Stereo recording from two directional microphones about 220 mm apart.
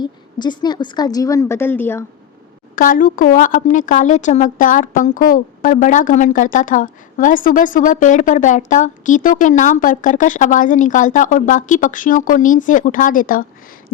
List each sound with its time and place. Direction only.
0.0 s a woman's voice: 20° left (ahead or behind)
2.7 s a woman's voice: 40° left (ahead or behind)